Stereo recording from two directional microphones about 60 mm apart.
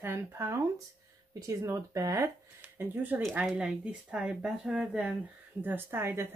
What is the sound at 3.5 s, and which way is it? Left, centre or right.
Speech, centre.